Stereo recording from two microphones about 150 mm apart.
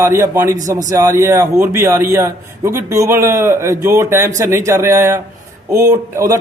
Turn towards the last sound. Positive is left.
turn(degrees=-20)  # may be behind; listen again after turning